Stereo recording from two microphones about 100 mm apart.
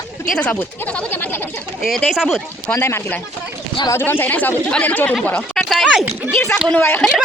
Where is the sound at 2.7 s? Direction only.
25° left (ahead or behind).